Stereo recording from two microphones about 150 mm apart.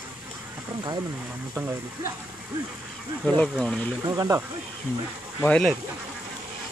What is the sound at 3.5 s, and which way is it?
Speech, 5° left (ahead or behind).